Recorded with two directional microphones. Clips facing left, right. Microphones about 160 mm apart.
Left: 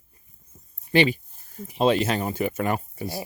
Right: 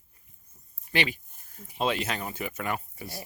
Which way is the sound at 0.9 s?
30° left (ahead or behind).